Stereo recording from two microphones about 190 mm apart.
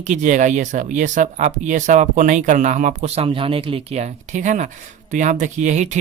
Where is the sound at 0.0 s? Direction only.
40° right (ahead or behind).